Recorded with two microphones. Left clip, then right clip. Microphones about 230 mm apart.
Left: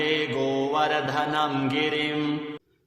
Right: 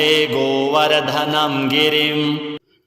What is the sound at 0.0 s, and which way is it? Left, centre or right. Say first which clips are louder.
Mantra: right 9 dB; right.